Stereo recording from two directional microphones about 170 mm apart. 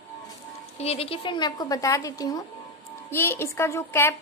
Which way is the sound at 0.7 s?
35° left (ahead or behind).